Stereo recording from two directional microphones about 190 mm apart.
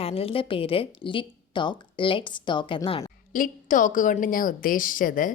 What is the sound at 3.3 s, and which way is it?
A woman's voice, 45° left (ahead or behind).